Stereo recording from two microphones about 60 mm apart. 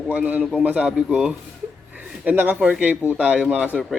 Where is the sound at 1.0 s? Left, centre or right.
Centre.